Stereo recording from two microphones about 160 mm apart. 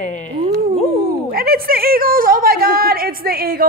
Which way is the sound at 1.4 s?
70° right (ahead or behind).